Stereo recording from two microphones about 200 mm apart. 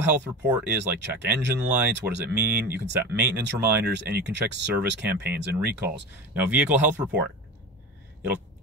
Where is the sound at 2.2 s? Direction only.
5° right (ahead or behind).